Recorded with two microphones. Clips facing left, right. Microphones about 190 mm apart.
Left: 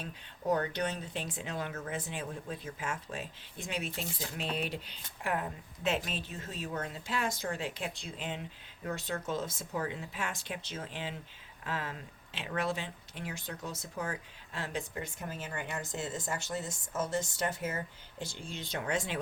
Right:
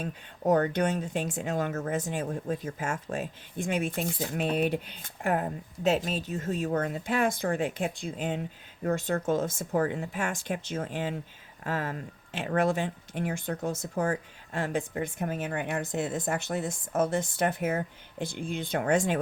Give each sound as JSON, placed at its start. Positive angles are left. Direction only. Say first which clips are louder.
{"t": 0.0, "sound": "speech", "louder": "right 7 dB", "side_deg": -50}